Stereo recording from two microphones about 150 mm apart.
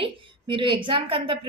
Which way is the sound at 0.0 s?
35° right (ahead or behind).